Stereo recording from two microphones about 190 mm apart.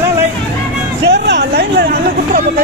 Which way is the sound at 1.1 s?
60° right (ahead or behind).